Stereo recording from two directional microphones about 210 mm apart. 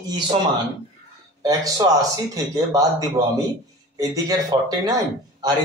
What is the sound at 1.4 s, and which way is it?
Speech, 15° right (ahead or behind).